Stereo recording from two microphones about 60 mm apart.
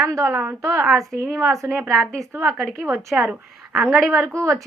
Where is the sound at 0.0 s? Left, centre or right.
Right.